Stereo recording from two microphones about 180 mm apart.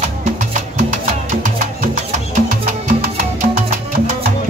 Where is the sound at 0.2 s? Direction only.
45° right (ahead or behind).